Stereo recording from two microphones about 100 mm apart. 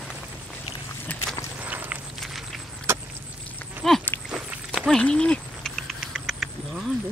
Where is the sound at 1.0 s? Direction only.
20° left (ahead or behind).